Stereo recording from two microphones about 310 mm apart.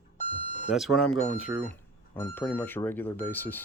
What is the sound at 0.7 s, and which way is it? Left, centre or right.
Speech, centre.